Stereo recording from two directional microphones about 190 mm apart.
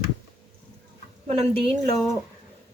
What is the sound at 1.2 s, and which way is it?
Speech, 30° right (ahead or behind).